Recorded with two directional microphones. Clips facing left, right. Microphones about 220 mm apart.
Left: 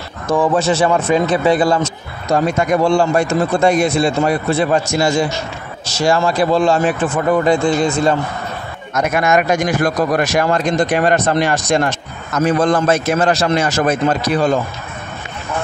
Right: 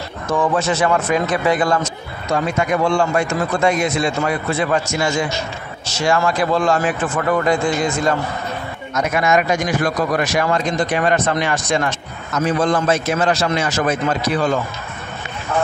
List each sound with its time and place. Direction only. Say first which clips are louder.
0.3 s speech: left 4 dB; 30° left (ahead or behind)
8.9 s a man's voice: left 2 dB; 55° left (ahead or behind)